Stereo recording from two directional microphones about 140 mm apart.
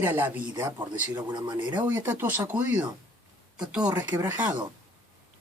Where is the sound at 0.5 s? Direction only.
30° right (ahead or behind).